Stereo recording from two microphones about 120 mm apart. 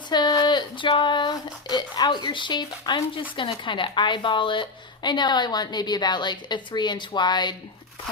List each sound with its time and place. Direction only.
0.1 s a woman's voice: 35° left (ahead or behind)